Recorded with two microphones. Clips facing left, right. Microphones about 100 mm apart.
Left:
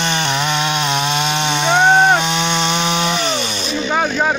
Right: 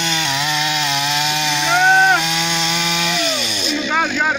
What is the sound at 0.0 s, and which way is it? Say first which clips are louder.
Chainsaw: left 3 dB; 55° left (ahead or behind).